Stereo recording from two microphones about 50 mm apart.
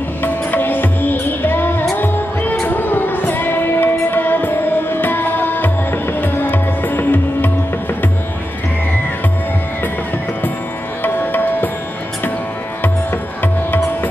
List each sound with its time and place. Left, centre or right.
0.2 s music: left
11.0 s music: left
12.8 s music: left